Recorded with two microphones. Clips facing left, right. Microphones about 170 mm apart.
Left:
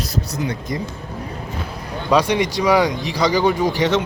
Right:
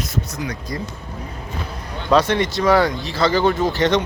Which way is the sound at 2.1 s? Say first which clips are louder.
Even; 10° left (ahead or behind).